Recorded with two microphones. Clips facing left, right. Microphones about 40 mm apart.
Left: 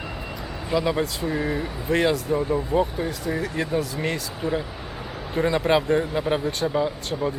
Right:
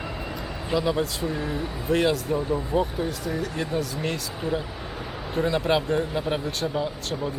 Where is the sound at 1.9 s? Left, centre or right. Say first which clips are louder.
Left 1 dB; centre.